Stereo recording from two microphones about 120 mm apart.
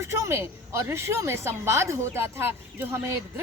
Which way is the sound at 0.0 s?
20° right (ahead or behind).